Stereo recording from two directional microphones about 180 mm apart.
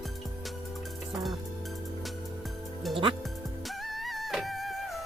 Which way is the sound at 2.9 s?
30° right (ahead or behind).